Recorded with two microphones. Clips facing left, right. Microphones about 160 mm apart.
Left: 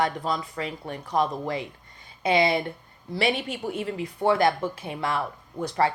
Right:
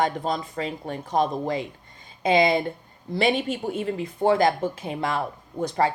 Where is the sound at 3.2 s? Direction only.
45° right (ahead or behind).